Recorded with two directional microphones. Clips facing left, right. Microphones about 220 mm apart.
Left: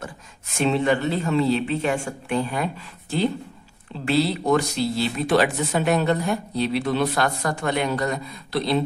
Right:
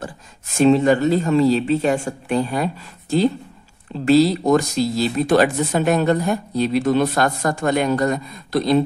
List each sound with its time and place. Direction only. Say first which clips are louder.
0.6 s speech: right 7 dB; 40° right (ahead or behind)